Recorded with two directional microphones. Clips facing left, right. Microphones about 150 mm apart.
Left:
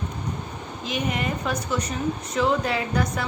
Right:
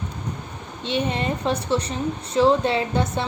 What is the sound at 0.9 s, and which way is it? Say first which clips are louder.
A woman's voice: right 3 dB; 30° right (ahead or behind).